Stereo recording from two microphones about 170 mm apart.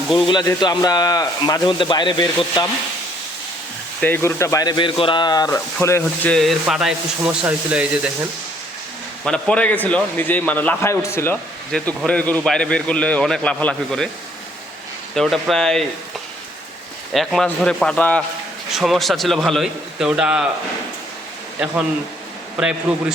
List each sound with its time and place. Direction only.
0.3 s speech: 25° left (ahead or behind)
4.0 s a man's voice: 15° left (ahead or behind)
6.3 s a man's voice: centre (ahead or behind)
9.2 s a man's voice: 5° left (ahead or behind)
15.1 s a man's voice: centre (ahead or behind)
17.1 s a man's voice: centre (ahead or behind)
22.5 s a man's voice: 5° right (ahead or behind)